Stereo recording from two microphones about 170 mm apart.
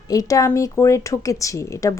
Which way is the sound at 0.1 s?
20° left (ahead or behind).